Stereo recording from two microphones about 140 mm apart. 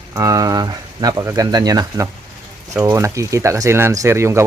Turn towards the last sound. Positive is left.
turn(degrees=-20)  # may be behind; listen again after turning